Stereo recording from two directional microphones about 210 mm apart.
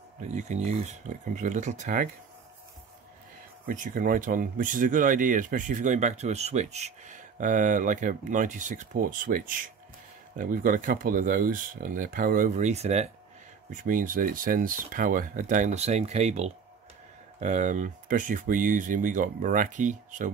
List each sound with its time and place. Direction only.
0.3 s speech: 35° right (ahead or behind)
3.6 s speech: 40° right (ahead or behind)